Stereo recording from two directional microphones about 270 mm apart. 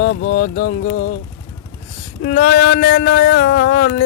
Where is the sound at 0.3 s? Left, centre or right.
Left.